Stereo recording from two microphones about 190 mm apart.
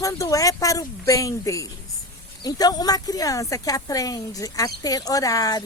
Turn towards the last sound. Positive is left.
turn(degrees=20)  # may be behind; listen again after turning